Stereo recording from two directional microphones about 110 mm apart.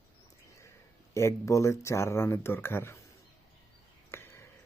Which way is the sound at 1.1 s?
25° left (ahead or behind).